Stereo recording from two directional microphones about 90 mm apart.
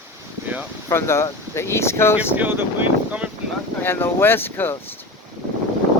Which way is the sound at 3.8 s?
25° left (ahead or behind).